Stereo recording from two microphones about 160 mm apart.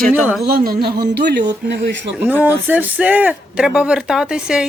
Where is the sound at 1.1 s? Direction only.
90° right.